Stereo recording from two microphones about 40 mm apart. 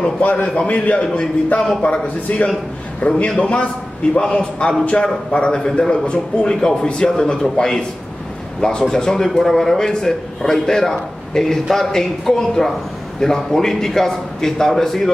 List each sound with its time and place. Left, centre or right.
0.2 s a man's voice: left; by 7.5 s centre
8.5 s a man's voice: left